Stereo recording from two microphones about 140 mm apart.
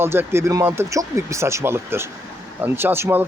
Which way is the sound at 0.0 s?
15° right (ahead or behind).